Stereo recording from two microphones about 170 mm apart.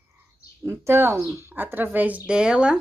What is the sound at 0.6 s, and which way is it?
A woman's voice, 15° right (ahead or behind).